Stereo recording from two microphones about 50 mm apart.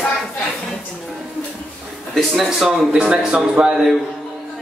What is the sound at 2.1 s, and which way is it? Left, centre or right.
Speech, centre.